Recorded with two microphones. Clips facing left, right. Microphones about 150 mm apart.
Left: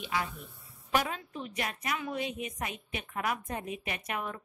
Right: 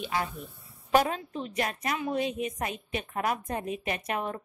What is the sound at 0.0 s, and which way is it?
A woman's voice, 40° right (ahead or behind).